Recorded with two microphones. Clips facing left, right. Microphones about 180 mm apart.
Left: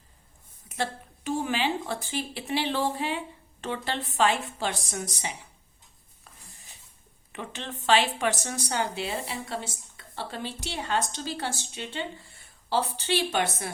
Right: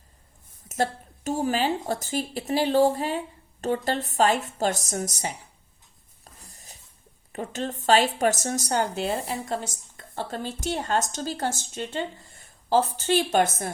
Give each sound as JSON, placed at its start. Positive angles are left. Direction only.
{"t": 0.7, "sound": "speech", "side_deg": -45}
{"t": 6.5, "sound": "a sound", "side_deg": -40}
{"t": 7.3, "sound": "speech", "side_deg": -40}